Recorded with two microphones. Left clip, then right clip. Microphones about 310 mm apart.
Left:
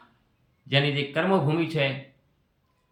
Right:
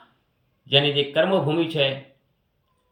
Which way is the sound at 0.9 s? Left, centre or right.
Centre.